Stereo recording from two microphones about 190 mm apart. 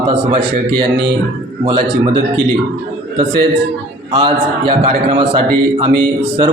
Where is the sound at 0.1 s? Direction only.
25° right (ahead or behind).